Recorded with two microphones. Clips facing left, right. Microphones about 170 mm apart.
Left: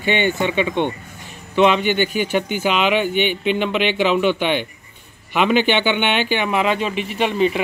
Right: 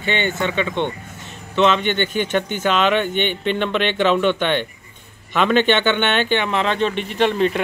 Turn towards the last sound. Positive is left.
turn(degrees=5)  # may be behind; listen again after turning